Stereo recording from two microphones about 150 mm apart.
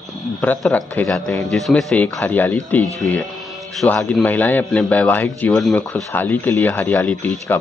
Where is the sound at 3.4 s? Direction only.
Centre (ahead or behind).